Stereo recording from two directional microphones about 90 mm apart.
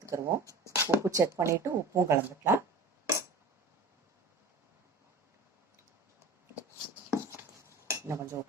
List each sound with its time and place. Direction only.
0.0 s speech: 35° right (ahead or behind)
7.1 s dishes: 35° right (ahead or behind)